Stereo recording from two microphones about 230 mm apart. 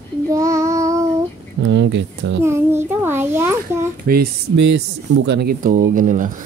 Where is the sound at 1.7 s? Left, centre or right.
Right.